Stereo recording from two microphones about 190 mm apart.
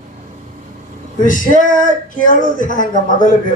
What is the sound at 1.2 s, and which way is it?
Speech, 45° left (ahead or behind).